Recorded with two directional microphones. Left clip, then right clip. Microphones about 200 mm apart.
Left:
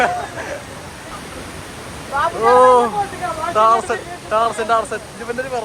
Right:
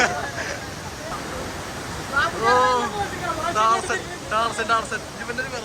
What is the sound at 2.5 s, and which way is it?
Speech, 5° left (ahead or behind).